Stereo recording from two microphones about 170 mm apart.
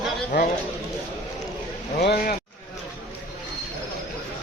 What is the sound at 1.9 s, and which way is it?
Speech, 70° left (ahead or behind).